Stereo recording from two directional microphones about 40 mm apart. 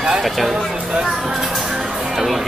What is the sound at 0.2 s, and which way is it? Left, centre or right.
Speech, centre.